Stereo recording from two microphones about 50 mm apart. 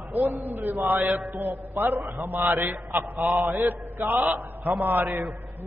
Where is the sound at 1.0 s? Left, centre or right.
Centre.